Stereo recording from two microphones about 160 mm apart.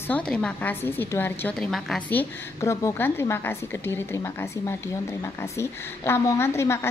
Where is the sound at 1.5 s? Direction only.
Centre (ahead or behind).